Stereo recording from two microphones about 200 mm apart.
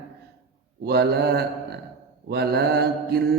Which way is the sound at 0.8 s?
55° right (ahead or behind).